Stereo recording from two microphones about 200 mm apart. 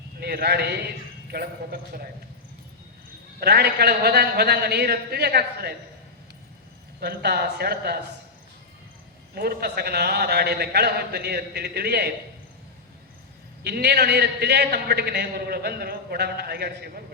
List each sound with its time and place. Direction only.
0.2 s a man's voice: 50° right (ahead or behind)
3.4 s a man's voice: 55° right (ahead or behind)
7.0 s speech: 55° right (ahead or behind)
9.3 s a man's voice: 50° right (ahead or behind)
13.7 s a man's voice: 55° right (ahead or behind)